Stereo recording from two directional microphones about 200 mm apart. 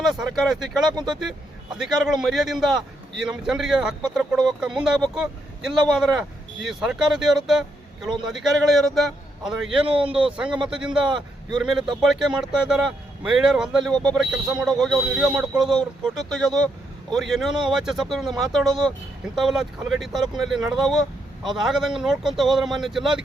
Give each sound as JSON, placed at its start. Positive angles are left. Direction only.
{"t": 0.0, "sound": "a man's voice", "side_deg": 0}
{"t": 9.8, "sound": "speech", "side_deg": -25}
{"t": 10.3, "sound": "a man's voice", "side_deg": -5}